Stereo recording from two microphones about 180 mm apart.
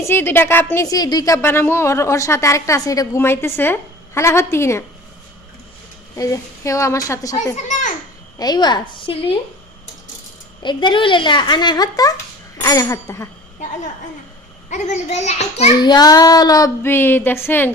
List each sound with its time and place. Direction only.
0.0 s a woman's voice: 10° left (ahead or behind)
6.1 s a woman's voice: 15° left (ahead or behind)
7.5 s a sound: 40° left (ahead or behind)
8.4 s female singing: 25° left (ahead or behind)
10.6 s female singing: 25° left (ahead or behind)
14.7 s a child's voice: 40° left (ahead or behind)
15.8 s female singing: 20° left (ahead or behind)